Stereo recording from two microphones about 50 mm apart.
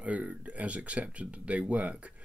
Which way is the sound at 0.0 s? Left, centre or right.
Right.